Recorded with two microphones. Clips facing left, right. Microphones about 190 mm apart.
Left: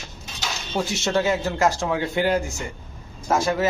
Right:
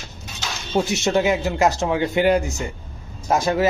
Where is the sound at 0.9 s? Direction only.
15° right (ahead or behind).